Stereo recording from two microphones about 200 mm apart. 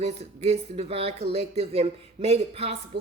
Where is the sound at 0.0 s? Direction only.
30° right (ahead or behind).